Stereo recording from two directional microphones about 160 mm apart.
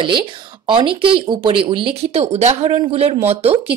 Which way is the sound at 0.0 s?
30° right (ahead or behind).